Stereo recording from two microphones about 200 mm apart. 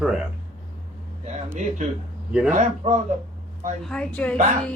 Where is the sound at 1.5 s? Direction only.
35° right (ahead or behind).